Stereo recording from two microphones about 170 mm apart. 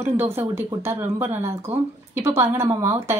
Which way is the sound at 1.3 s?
15° right (ahead or behind).